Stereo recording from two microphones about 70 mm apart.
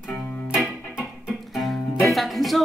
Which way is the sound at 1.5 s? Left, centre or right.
Centre.